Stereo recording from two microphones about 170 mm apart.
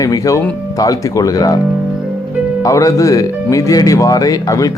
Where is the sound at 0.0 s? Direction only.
20° left (ahead or behind).